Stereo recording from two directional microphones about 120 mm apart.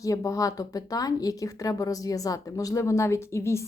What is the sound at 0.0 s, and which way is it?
Speech, 30° left (ahead or behind).